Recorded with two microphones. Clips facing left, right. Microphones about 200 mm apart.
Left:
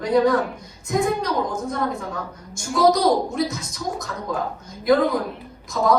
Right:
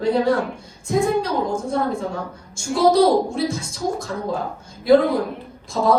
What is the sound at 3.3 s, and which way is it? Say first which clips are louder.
Speech: right 1 dB; 30° right (ahead or behind).